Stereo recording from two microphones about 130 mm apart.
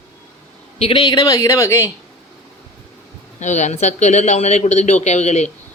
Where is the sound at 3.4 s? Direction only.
65° left (ahead or behind).